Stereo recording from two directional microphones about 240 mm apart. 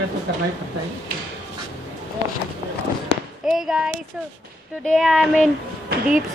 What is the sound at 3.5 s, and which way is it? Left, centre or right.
Speech, centre.